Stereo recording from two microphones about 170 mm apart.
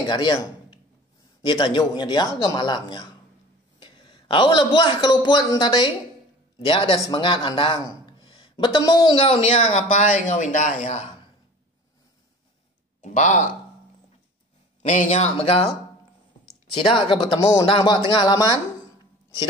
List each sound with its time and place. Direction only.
0.0 s a man's voice: 25° left (ahead or behind)
13.0 s speech: 45° left (ahead or behind)
14.8 s speech: 40° left (ahead or behind)
16.7 s speech: 30° left (ahead or behind)